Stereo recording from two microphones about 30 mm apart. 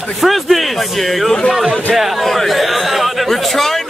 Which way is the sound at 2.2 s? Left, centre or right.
Centre.